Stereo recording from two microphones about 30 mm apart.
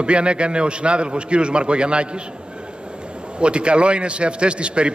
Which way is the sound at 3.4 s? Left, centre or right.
Right.